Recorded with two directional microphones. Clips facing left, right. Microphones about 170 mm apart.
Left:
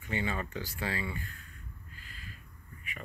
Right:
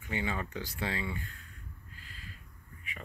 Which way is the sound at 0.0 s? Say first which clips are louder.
Left 1 dB; 15° right (ahead or behind).